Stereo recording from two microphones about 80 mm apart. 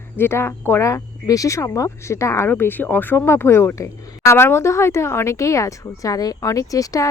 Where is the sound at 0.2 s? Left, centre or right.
Left.